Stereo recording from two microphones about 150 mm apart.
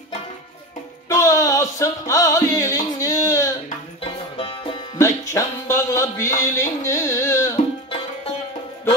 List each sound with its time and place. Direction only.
1.0 s music: 20° left (ahead or behind)
4.0 s music: 35° left (ahead or behind)
4.9 s music: 20° left (ahead or behind)